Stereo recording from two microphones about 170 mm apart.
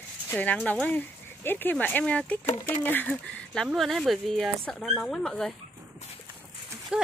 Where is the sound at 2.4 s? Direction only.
45° left (ahead or behind).